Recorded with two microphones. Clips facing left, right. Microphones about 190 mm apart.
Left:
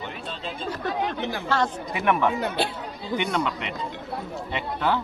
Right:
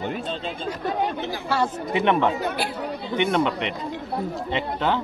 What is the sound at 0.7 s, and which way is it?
Chatter, 10° right (ahead or behind).